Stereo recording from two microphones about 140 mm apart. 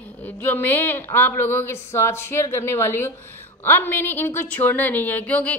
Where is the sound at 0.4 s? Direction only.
15° left (ahead or behind).